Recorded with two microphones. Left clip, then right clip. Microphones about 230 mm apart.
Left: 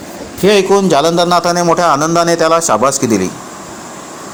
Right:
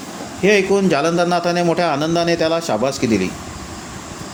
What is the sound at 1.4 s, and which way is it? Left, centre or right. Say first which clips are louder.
Speech: left 6 dB; centre.